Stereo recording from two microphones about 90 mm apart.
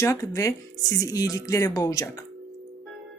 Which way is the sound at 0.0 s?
35° left (ahead or behind).